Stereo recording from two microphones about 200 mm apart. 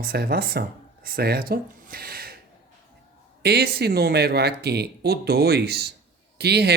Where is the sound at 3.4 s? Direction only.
55° right (ahead or behind).